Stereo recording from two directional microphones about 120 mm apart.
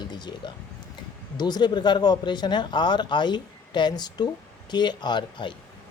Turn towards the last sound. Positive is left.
turn(degrees=40)  # may be behind; listen again after turning